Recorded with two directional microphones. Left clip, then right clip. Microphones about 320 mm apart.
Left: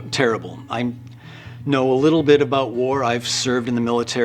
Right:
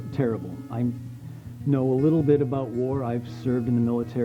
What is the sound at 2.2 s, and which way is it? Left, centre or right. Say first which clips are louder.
Speech: left 8 dB; centre.